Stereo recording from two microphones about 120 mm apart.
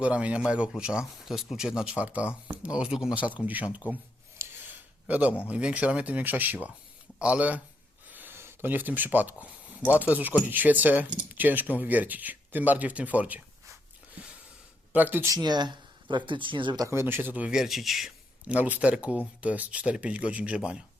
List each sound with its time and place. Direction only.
0.0 s speech: 10° right (ahead or behind)
4.4 s a sound: 15° right (ahead or behind)
5.5 s speech: 10° right (ahead or behind)
14.9 s speech: 15° right (ahead or behind)
15.3 s speech: 35° right (ahead or behind)
16.8 s speech: 20° right (ahead or behind); by 18.5 s centre (ahead or behind)
18.5 s speech: 10° right (ahead or behind)